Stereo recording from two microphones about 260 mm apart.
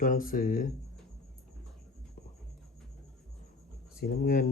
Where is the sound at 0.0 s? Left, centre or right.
Left.